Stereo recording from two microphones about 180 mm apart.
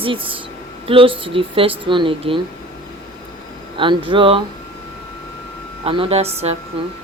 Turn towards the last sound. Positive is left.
turn(degrees=-35)  # may be behind; listen again after turning